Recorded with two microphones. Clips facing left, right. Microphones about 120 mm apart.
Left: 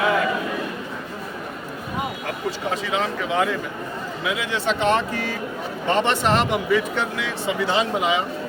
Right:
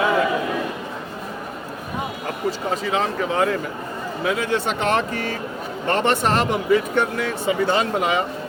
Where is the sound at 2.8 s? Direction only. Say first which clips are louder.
Right 4 dB; 35° right (ahead or behind).